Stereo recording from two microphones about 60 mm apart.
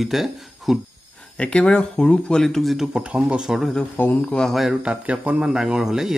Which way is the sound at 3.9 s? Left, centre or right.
Left.